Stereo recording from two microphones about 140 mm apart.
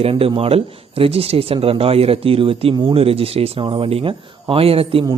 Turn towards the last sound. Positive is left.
turn(degrees=-45)  # may be behind; listen again after turning